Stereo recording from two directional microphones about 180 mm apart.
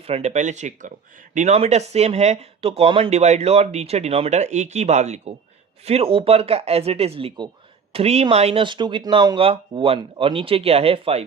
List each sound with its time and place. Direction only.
0.1 s speech: 40° right (ahead or behind)